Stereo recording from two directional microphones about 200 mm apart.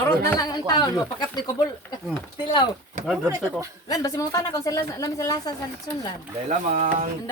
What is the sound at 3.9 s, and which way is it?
A woman's voice, 15° left (ahead or behind).